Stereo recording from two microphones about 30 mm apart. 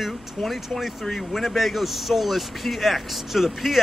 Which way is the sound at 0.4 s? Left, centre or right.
Centre.